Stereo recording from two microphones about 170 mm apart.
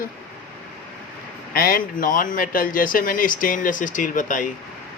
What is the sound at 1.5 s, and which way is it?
Speech, 55° left (ahead or behind).